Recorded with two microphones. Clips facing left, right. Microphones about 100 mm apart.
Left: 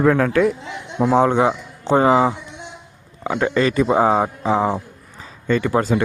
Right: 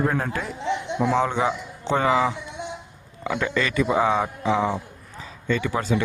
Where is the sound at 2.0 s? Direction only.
35° left (ahead or behind).